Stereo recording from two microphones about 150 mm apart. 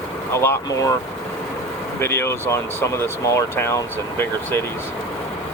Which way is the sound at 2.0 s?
15° left (ahead or behind).